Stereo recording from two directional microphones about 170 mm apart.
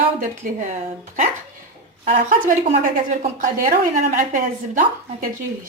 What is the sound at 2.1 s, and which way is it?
Speech, 50° right (ahead or behind).